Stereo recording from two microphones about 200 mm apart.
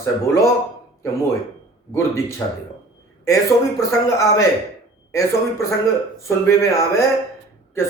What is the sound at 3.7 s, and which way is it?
Speech, 15° left (ahead or behind).